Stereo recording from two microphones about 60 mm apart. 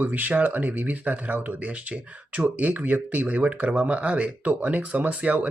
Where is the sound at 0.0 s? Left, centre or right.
Right.